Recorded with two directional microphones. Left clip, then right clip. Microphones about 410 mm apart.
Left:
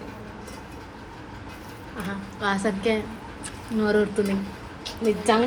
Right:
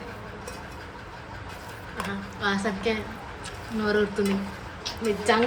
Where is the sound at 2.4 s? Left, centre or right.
Centre.